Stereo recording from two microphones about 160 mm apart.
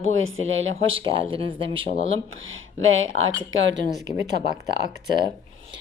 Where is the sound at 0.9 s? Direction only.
35° right (ahead or behind).